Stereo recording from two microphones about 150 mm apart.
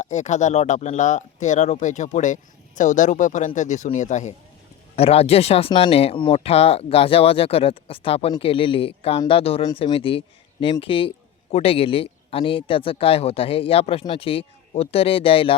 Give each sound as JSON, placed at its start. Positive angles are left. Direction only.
{"t": 0.0, "sound": "speech", "side_deg": 50}
{"t": 4.9, "sound": "speech", "side_deg": 40}